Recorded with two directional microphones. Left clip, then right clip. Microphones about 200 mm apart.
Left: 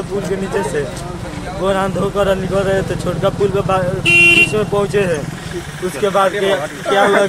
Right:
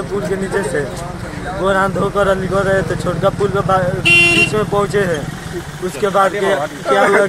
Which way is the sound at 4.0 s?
40° right (ahead or behind).